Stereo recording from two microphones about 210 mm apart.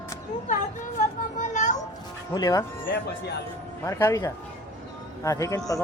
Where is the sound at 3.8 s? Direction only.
15° left (ahead or behind).